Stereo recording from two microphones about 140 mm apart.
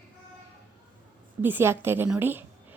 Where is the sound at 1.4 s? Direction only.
15° right (ahead or behind).